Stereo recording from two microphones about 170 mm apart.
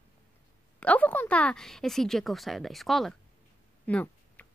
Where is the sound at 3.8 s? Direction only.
10° left (ahead or behind).